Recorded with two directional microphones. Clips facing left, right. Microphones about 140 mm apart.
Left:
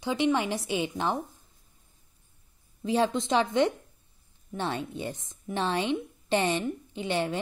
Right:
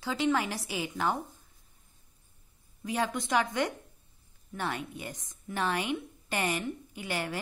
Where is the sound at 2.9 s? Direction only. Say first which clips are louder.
Left 5 dB; 25° left (ahead or behind).